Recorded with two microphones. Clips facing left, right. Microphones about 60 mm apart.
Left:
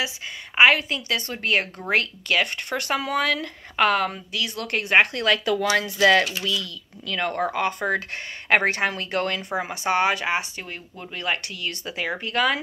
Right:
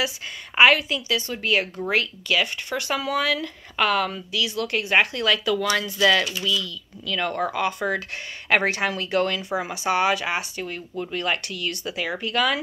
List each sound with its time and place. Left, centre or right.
0.6 s speech: left
0.8 s speech: left; by 11.3 s centre
11.4 s speech: left